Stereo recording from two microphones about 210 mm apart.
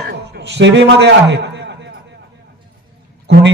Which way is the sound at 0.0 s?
55° right (ahead or behind).